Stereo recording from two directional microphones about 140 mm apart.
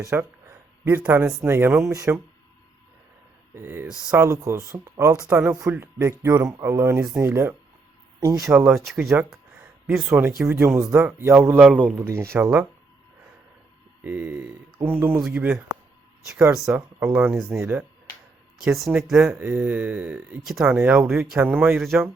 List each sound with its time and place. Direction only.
0.0 s speech: 20° right (ahead or behind)
3.5 s a man's voice: 15° right (ahead or behind)
8.5 s a man's voice: 10° right (ahead or behind)
14.0 s a man's voice: 10° right (ahead or behind)
19.1 s a man's voice: 10° right (ahead or behind)
20.7 s a man's voice: 10° right (ahead or behind)